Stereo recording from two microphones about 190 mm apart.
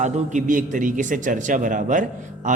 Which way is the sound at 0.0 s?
40° right (ahead or behind).